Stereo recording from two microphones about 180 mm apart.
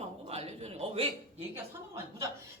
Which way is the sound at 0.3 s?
35° right (ahead or behind).